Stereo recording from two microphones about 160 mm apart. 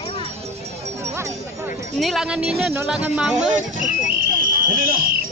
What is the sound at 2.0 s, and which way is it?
Speech, centre (ahead or behind).